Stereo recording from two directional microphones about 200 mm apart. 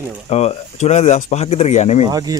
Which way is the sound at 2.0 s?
20° right (ahead or behind).